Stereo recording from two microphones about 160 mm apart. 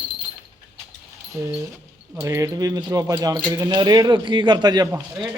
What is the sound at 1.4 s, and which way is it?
Speech, 20° right (ahead or behind).